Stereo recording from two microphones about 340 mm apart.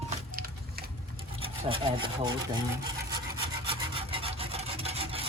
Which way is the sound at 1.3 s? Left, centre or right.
Centre.